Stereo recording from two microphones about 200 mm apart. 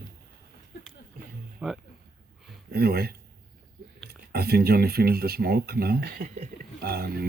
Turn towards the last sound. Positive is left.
turn(degrees=-50)  # may be behind; listen again after turning